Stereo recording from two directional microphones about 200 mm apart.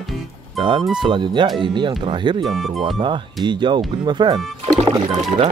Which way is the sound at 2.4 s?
Centre (ahead or behind).